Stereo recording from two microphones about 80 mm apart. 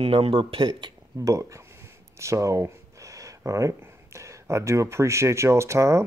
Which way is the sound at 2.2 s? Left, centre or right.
Right.